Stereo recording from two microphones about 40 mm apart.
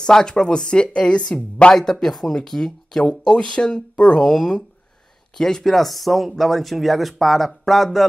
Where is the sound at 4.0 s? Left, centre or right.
Centre.